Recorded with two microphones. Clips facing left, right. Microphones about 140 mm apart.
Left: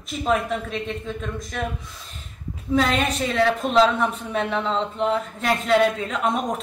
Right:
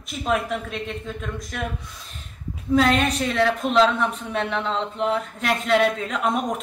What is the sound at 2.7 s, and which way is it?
A woman's voice, centre (ahead or behind).